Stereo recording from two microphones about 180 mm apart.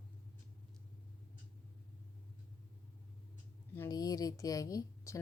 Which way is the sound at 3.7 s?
15° left (ahead or behind).